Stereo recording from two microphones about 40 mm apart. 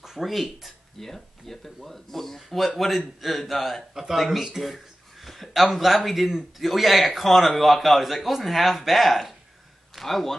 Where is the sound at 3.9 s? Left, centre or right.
Centre.